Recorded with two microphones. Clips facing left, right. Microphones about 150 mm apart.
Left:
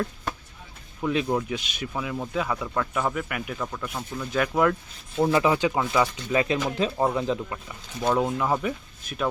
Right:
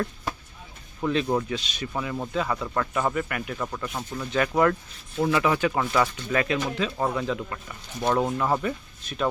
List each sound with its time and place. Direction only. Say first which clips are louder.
1.0 s speech: even; 5° left (ahead or behind)
1.9 s speech: right 1 dB; centre (ahead or behind)
5.1 s speech: left 2 dB; 25° left (ahead or behind)
8.1 s speech: even; 5° left (ahead or behind)